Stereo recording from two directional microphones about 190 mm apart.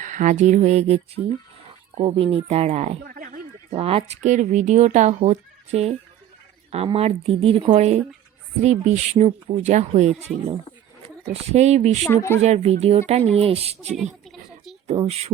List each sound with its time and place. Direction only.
0.0 s speech: 40° right (ahead or behind)
3.0 s a sound: 50° right (ahead or behind)
3.7 s speech: 30° right (ahead or behind)
11.3 s speech: 35° right (ahead or behind)
12.0 s speech: 15° left (ahead or behind)
12.4 s speech: 35° right (ahead or behind)
13.9 s a sound: centre (ahead or behind)
14.8 s speech: 30° right (ahead or behind)